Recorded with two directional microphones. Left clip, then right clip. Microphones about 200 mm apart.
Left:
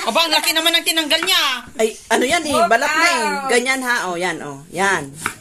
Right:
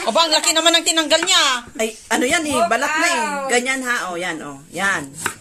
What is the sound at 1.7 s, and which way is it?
A woman's voice, 60° left (ahead or behind).